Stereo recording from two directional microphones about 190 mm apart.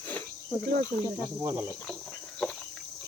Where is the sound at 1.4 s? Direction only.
15° right (ahead or behind).